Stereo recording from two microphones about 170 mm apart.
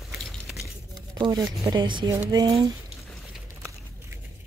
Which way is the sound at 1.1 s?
25° right (ahead or behind).